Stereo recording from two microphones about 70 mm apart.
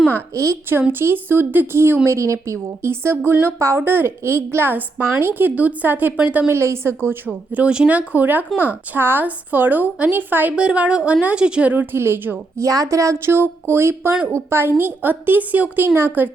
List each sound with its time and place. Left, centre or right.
0.7 s a woman's voice: right
2.0 s a woman's voice: right
6.5 s a woman's voice: right
7.3 s a woman's voice: centre
10.5 s a woman's voice: centre; by 12.4 s right
12.5 s a woman's voice: right
13.2 s a woman's voice: right